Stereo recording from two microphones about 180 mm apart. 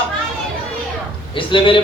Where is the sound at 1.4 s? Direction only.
25° left (ahead or behind).